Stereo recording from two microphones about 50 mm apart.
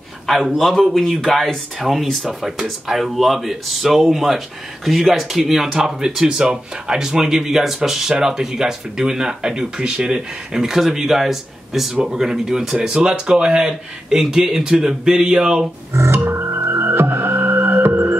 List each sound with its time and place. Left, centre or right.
0.3 s speech: centre
14.1 s speech: centre
15.9 s music: right